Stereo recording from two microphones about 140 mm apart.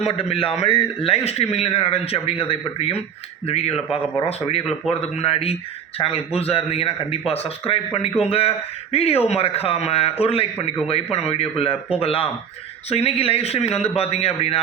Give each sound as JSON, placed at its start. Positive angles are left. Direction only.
{"t": 0.0, "sound": "a man's voice", "side_deg": 45}